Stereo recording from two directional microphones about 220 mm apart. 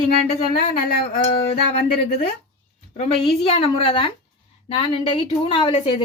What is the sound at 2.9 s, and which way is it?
A woman's voice, 25° left (ahead or behind).